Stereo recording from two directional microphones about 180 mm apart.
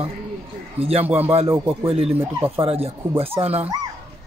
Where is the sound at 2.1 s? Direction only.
10° right (ahead or behind).